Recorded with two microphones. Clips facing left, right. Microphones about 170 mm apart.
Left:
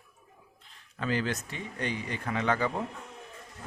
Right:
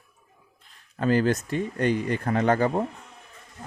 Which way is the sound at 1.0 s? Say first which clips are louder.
Right 9 dB; 45° right (ahead or behind).